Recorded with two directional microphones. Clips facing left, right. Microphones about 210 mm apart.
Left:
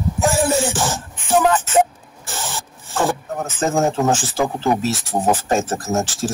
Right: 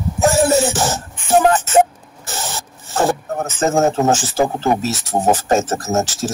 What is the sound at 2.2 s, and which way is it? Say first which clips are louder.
Filing: right 2 dB; 40° right (ahead or behind).